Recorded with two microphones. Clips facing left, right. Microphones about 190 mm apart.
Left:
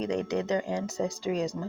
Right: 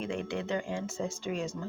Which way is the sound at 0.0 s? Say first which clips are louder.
Left 5 dB; 40° left (ahead or behind).